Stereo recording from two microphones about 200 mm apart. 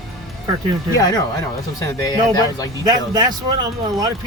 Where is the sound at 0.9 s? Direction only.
20° left (ahead or behind).